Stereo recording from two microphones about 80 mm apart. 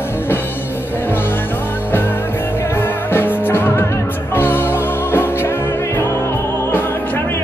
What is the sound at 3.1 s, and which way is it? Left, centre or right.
Music, left.